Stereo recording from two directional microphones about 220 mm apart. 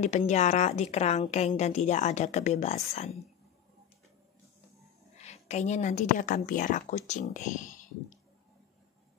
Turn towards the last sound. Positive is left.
turn(degrees=35)  # may be behind; listen again after turning